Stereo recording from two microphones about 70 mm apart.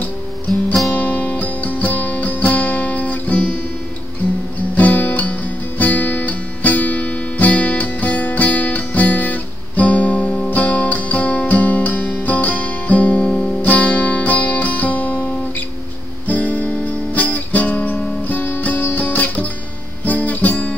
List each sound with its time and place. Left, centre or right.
0.9 s guitar: left
4.7 s guitar: left
16.3 s music: left
20.1 s guitar: left